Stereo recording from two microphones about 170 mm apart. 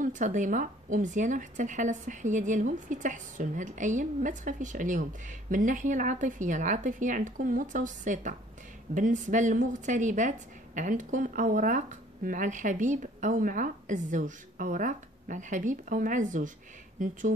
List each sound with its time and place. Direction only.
0.0 s a woman's voice: 50° right (ahead or behind)